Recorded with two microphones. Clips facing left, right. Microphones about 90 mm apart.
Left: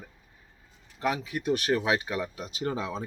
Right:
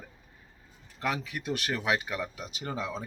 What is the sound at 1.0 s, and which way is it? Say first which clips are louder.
Speech: left 4 dB; 20° left (ahead or behind).